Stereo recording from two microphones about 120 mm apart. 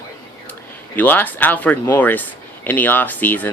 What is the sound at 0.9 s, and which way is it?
Speech, 15° left (ahead or behind).